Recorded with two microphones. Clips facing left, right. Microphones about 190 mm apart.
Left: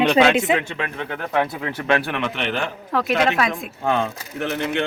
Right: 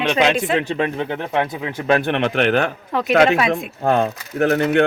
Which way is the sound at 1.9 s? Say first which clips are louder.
Right 4 dB; 30° right (ahead or behind).